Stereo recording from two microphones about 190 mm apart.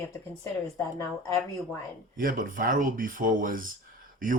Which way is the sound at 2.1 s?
45° right (ahead or behind).